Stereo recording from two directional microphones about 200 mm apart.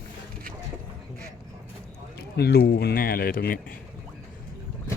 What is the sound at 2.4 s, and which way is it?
Speech, 55° left (ahead or behind).